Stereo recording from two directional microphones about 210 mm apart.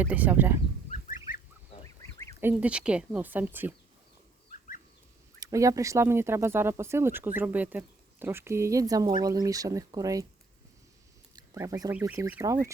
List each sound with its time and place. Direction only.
0.0 s speech: 5° right (ahead or behind)
0.9 s fowl: 35° left (ahead or behind)
2.4 s speech: 5° right (ahead or behind)
5.4 s speech: 15° right (ahead or behind)
11.3 s speech: 15° right (ahead or behind)